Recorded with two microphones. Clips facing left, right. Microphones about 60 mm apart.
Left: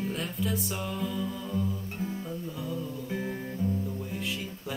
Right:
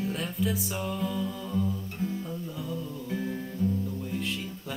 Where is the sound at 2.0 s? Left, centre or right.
Centre.